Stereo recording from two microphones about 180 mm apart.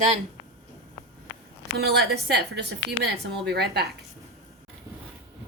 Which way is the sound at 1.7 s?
60° right (ahead or behind).